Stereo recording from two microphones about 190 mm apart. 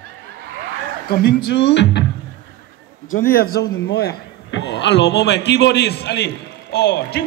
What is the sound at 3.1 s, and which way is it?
A man's voice, 50° left (ahead or behind).